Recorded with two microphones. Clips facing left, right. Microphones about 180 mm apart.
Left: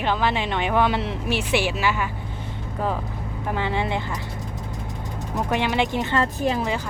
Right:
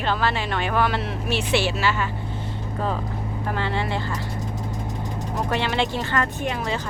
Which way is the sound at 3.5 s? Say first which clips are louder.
Left 2 dB; 15° left (ahead or behind).